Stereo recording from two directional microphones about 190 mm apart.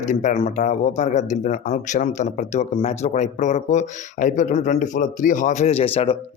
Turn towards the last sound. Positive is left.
turn(degrees=30)  # may be behind; listen again after turning